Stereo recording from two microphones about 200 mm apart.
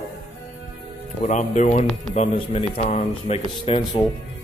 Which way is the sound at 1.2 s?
35° left (ahead or behind).